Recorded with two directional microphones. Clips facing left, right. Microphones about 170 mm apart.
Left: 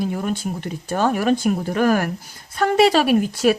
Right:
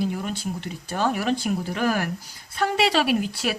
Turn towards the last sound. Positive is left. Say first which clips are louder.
# left 7 dB
turn(degrees=45)  # may be behind; listen again after turning